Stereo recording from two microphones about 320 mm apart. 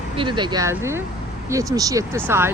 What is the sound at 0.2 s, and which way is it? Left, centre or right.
Speech, centre.